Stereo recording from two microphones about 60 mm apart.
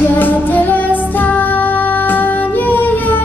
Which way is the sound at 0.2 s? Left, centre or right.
Left.